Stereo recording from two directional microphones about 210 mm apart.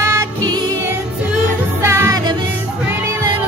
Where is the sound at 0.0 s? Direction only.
15° right (ahead or behind).